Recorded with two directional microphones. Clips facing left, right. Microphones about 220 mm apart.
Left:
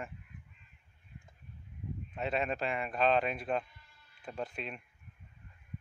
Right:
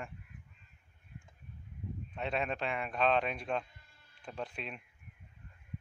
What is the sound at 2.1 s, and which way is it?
Speech, centre (ahead or behind).